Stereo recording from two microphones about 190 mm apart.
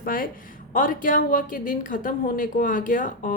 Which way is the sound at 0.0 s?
50° left (ahead or behind).